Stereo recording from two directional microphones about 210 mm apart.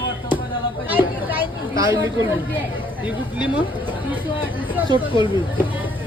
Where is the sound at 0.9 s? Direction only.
10° right (ahead or behind).